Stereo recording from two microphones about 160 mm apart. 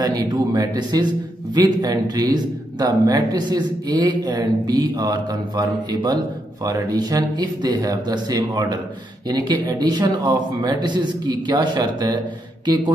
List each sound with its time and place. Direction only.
0.0 s a man's voice: 25° right (ahead or behind)